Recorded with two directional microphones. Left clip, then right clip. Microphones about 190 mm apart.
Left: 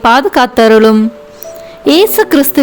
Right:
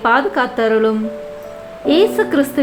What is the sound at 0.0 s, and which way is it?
A woman's voice, 60° left (ahead or behind).